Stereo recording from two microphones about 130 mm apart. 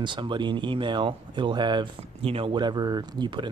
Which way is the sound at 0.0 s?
35° right (ahead or behind).